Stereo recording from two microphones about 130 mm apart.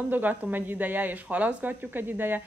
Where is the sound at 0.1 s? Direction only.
15° right (ahead or behind).